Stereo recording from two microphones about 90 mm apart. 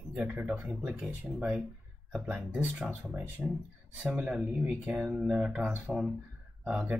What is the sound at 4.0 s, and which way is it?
Speech, 15° right (ahead or behind).